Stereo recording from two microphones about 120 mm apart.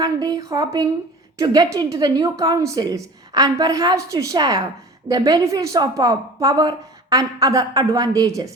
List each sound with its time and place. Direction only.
0.0 s a woman's voice: 30° right (ahead or behind)